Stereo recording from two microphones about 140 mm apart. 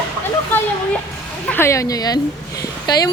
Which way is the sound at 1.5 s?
15° left (ahead or behind).